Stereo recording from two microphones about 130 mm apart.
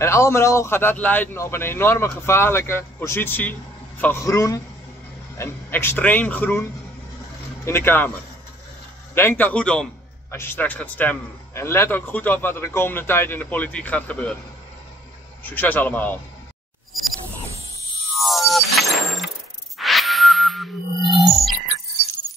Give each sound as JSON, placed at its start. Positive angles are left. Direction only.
{"t": 0.0, "sound": "a man's voice", "side_deg": 20}
{"t": 7.6, "sound": "a man's voice", "side_deg": 20}
{"t": 9.1, "sound": "a man's voice", "side_deg": 15}
{"t": 15.4, "sound": "a man's voice", "side_deg": 15}
{"t": 18.1, "sound": "mechanisms", "side_deg": 0}
{"t": 19.8, "sound": "music", "side_deg": 0}